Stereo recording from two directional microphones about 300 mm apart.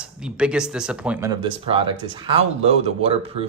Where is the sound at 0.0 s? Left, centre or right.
Centre.